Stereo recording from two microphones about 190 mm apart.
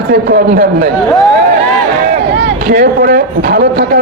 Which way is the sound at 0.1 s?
55° right (ahead or behind).